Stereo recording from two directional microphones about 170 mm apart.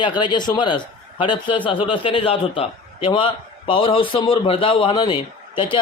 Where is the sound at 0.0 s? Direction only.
25° left (ahead or behind).